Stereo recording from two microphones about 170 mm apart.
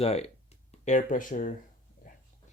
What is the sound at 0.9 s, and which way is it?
Speech, 50° left (ahead or behind).